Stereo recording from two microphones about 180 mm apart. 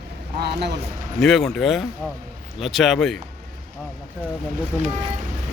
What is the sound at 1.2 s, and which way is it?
Speech, centre (ahead or behind).